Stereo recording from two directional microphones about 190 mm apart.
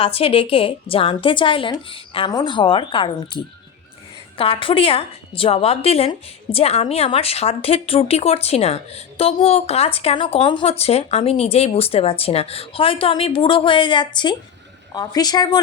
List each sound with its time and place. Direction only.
0.0 s a woman's voice: 30° left (ahead or behind)
4.4 s a woman's voice: 30° left (ahead or behind)